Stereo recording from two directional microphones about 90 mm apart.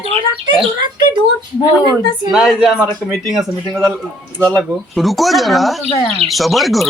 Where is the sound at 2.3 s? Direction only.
5° right (ahead or behind).